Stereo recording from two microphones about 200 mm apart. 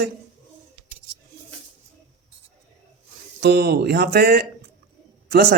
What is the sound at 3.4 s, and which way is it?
Speech, 55° right (ahead or behind).